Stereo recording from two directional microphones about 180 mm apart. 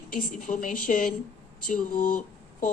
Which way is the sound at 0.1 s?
50° left (ahead or behind).